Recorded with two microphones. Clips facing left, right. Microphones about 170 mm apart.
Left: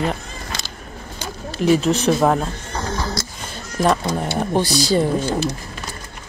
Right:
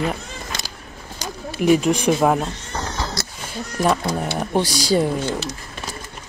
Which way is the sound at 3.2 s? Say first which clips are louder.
Left 1 dB; 70° right (ahead or behind).